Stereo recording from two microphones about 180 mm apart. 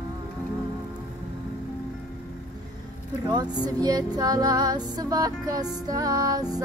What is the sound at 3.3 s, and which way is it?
Music, 20° right (ahead or behind).